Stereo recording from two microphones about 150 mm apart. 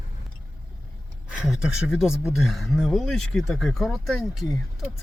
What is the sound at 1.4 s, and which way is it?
Speech, 5° right (ahead or behind).